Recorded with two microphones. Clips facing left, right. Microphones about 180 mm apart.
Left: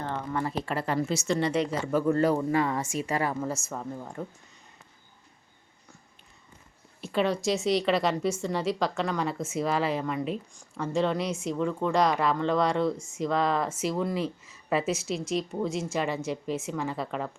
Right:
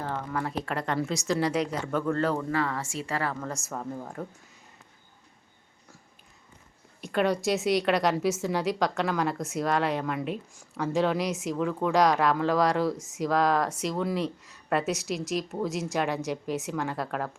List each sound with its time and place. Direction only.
0.0 s a woman's voice: centre (ahead or behind); by 3.5 s 15° left (ahead or behind)
3.5 s a woman's voice: centre (ahead or behind)
7.0 s a woman's voice: centre (ahead or behind)